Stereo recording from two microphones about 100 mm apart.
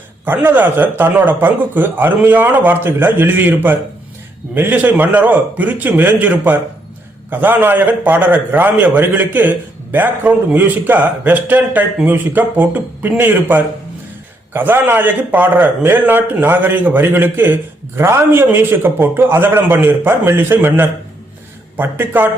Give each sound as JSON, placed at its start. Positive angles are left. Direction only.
{"t": 0.3, "sound": "a man's voice", "side_deg": -20}